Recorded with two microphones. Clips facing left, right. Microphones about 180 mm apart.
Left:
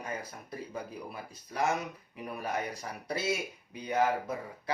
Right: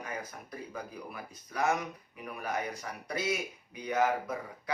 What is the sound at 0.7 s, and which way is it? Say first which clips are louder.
Speech: left 2 dB; 30° left (ahead or behind).